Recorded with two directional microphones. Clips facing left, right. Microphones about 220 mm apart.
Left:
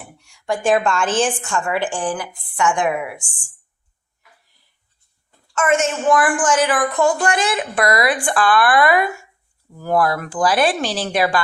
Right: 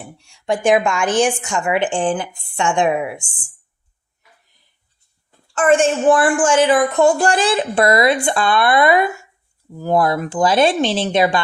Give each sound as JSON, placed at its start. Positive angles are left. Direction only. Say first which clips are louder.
{"t": 0.2, "sound": "a woman's voice", "louder": "right 3 dB", "side_deg": -25}
{"t": 5.5, "sound": "a woman's voice", "louder": "right 4 dB", "side_deg": -30}